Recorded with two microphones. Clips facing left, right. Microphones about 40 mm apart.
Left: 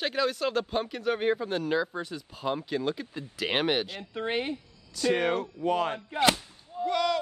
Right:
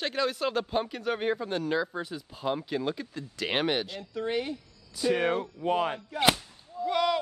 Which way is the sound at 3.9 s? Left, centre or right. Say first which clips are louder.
Even; left.